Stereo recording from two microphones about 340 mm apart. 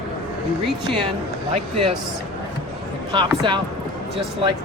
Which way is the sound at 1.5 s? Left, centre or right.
Centre.